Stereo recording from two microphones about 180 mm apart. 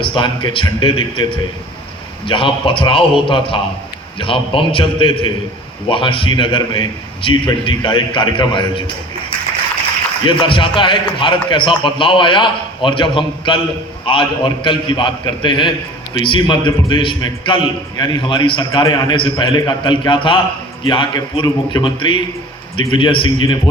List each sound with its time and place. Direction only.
0.0 s a man's voice: 30° left (ahead or behind)
10.2 s a man's voice: 30° left (ahead or behind)